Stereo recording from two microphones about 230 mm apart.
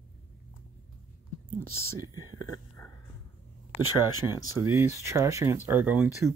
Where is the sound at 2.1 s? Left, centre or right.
Centre.